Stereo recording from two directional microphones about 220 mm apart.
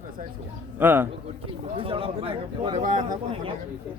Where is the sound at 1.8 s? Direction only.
25° right (ahead or behind).